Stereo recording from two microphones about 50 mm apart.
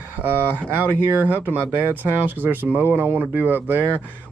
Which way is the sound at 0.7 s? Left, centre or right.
Right.